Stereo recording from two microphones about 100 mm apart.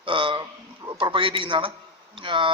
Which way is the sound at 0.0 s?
60° right (ahead or behind).